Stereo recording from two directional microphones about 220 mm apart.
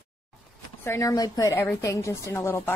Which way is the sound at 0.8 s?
15° left (ahead or behind).